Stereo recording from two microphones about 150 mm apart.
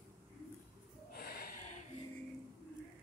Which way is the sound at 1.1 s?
80° left.